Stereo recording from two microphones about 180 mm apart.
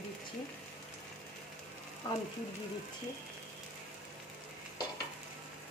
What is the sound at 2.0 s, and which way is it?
Ratchet, 20° left (ahead or behind).